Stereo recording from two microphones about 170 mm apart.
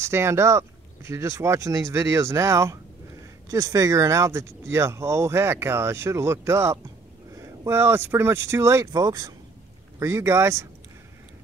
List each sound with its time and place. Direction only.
0.0 s speech: 15° right (ahead or behind)